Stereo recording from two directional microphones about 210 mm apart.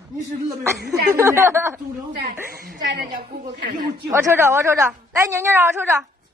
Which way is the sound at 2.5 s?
45° right (ahead or behind).